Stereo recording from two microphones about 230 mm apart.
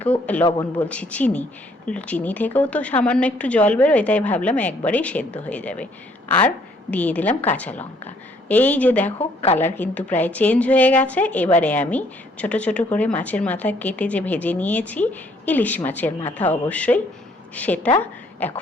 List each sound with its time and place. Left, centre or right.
0.0 s a woman's voice: centre
6.9 s speech: centre
9.1 s a woman's voice: left
9.6 s a woman's voice: centre